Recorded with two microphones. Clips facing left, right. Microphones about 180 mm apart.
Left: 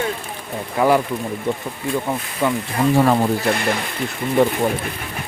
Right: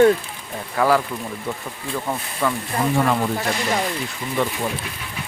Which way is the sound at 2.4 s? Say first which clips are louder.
Left 3 dB; 20° left (ahead or behind).